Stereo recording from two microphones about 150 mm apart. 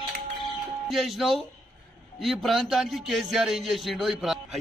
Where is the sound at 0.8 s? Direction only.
Centre (ahead or behind).